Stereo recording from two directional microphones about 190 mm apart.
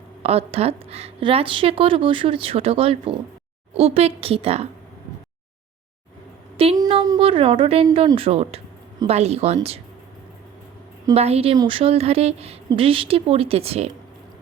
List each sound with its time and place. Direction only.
0.2 s a woman's voice: 30° right (ahead or behind)
6.6 s a woman's voice: 30° right (ahead or behind)
11.1 s speech: 30° right (ahead or behind)